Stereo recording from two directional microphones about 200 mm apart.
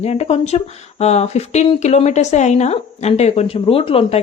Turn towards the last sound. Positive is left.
turn(degrees=25)  # may be behind; listen again after turning